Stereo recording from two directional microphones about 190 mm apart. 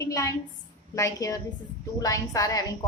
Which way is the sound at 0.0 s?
15° left (ahead or behind).